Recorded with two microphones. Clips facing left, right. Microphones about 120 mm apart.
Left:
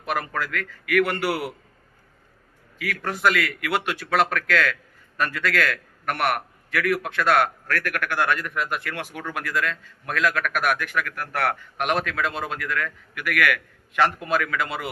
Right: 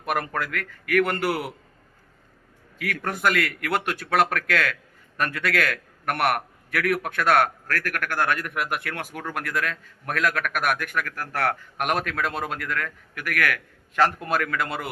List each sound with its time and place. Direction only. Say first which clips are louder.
0.0 s a man's voice: even; 55° right (ahead or behind)
1.3 s a man's voice: left 1 dB; centre (ahead or behind)
2.7 s a man's voice: even; 55° right (ahead or behind)